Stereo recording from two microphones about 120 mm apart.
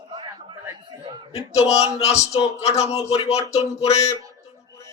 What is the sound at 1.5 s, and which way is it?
Speech, 65° left (ahead or behind).